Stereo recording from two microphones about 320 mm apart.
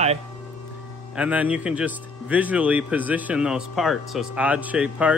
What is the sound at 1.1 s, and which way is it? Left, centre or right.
Speech, centre.